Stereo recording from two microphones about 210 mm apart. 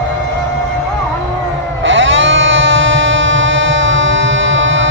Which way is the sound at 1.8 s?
65° right (ahead or behind).